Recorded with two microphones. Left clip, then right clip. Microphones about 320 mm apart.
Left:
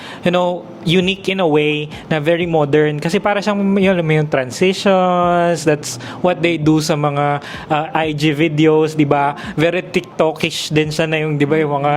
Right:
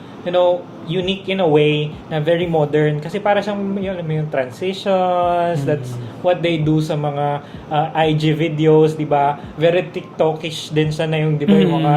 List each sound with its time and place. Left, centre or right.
0.3 s speech: left